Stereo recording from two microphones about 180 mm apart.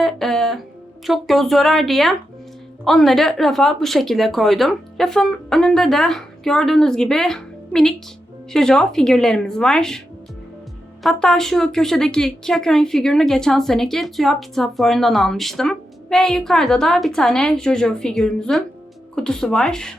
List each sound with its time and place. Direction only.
0.0 s speech: centre (ahead or behind)
11.0 s speech: 5° left (ahead or behind)